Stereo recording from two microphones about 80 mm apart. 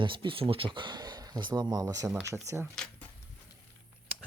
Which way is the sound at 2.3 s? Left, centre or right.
Right.